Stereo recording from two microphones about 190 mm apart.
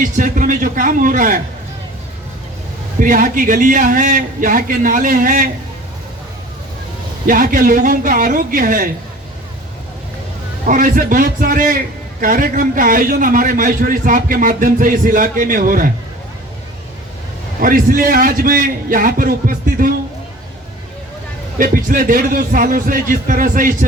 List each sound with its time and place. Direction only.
0.0 s a man's voice: 45° right (ahead or behind)
3.0 s a man's voice: 45° right (ahead or behind)
7.3 s a man's voice: 45° right (ahead or behind)
10.7 s a man's voice: 45° right (ahead or behind)
17.6 s a man's voice: 45° right (ahead or behind)
21.6 s a man's voice: 45° right (ahead or behind)